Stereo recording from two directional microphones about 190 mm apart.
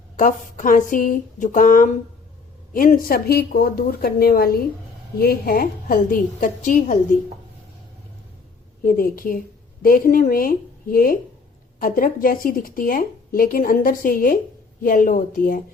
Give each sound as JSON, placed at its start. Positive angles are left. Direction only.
{"t": 0.2, "sound": "a woman's voice", "side_deg": 45}
{"t": 8.8, "sound": "a woman's voice", "side_deg": 50}